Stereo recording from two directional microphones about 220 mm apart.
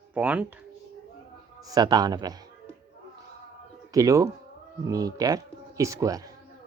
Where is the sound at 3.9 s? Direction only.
15° right (ahead or behind).